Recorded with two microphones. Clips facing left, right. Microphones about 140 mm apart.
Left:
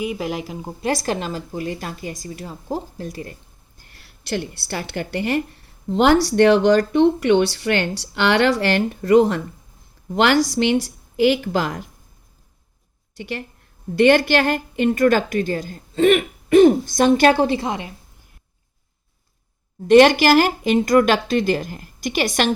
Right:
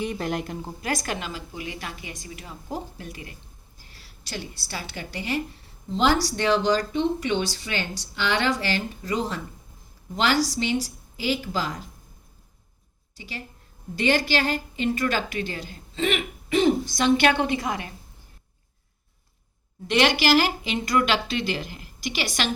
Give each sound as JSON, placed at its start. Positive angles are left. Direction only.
{"t": 0.0, "sound": "a woman's voice", "side_deg": 5}
{"t": 0.8, "sound": "a woman's voice", "side_deg": 30}
{"t": 3.8, "sound": "a woman's voice", "side_deg": 55}
{"t": 13.1, "sound": "a woman's voice", "side_deg": 60}
{"t": 19.9, "sound": "a woman's voice", "side_deg": 45}